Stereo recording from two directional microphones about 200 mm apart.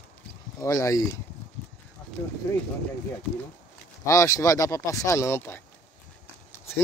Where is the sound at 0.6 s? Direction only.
15° left (ahead or behind).